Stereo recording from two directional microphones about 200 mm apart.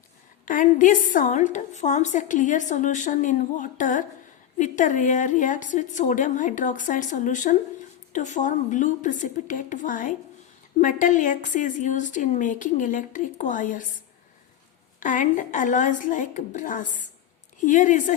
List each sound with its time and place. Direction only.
0.4 s a woman's voice: 40° left (ahead or behind)
15.0 s a woman's voice: 40° left (ahead or behind)